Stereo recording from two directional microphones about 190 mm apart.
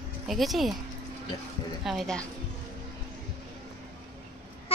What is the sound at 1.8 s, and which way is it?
Speech, centre (ahead or behind).